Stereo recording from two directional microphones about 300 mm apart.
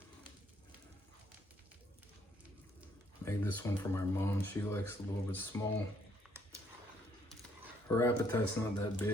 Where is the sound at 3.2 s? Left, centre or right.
Centre.